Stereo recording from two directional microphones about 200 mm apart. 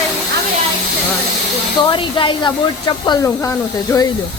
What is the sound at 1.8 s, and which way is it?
Speech, 20° left (ahead or behind).